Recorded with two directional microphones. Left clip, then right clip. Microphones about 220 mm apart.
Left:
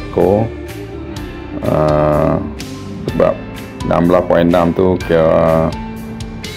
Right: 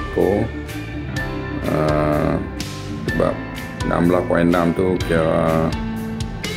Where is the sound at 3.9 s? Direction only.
20° left (ahead or behind).